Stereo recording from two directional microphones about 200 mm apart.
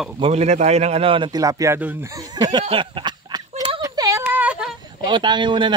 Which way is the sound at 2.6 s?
25° right (ahead or behind).